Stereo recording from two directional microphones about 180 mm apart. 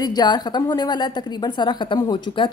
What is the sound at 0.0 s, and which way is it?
A woman's voice, 20° left (ahead or behind).